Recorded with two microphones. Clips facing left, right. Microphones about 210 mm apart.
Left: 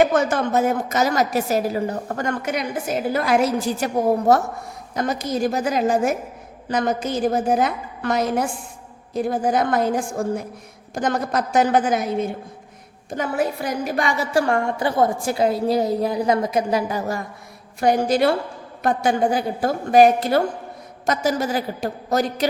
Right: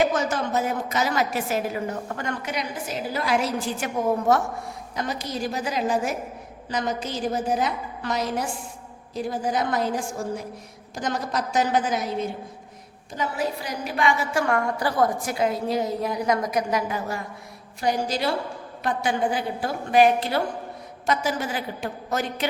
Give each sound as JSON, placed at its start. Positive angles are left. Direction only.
{"t": 0.0, "sound": "a woman's voice", "side_deg": 55}
{"t": 4.9, "sound": "a woman's voice", "side_deg": 45}
{"t": 17.7, "sound": "a woman's voice", "side_deg": 55}
{"t": 18.8, "sound": "a woman's voice", "side_deg": 45}